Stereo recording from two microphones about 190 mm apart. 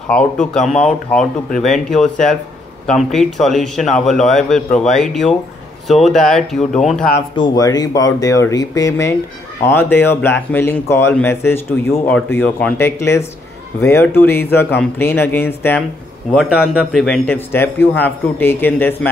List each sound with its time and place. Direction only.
0.1 s a man's voice: 5° left (ahead or behind)
7.3 s speech: 20° left (ahead or behind)
16.3 s speech: 5° right (ahead or behind)